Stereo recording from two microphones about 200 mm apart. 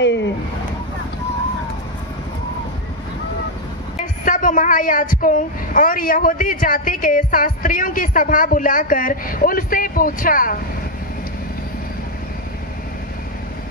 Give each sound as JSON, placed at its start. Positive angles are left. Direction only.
{"t": 4.0, "sound": "speech", "side_deg": 40}